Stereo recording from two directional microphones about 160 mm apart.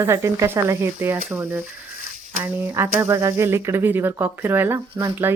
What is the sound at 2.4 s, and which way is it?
Speech, 15° right (ahead or behind).